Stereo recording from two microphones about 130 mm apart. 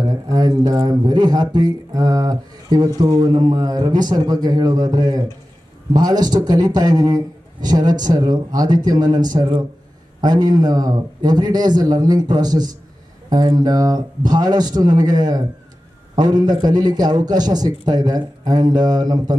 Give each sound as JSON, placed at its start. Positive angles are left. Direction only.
{"t": 0.1, "sound": "a man's voice", "side_deg": -30}